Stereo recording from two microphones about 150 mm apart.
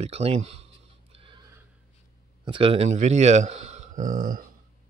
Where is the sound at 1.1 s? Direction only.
35° right (ahead or behind).